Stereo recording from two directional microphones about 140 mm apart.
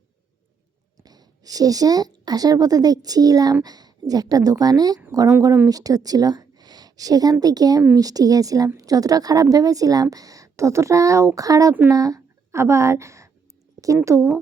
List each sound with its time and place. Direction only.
1.0 s a woman's voice: 25° right (ahead or behind)